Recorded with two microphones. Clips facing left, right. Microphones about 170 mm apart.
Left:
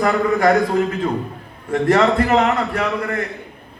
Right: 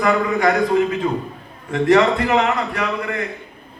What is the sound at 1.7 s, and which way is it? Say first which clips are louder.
A man's voice: even; 45° left (ahead or behind).